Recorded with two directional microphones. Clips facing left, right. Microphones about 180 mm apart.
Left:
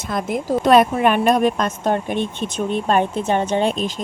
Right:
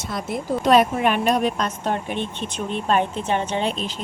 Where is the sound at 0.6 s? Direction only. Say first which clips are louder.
Left 3 dB; 50° left (ahead or behind).